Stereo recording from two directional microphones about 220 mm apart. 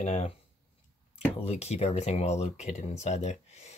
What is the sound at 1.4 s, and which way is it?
Speech, 30° left (ahead or behind).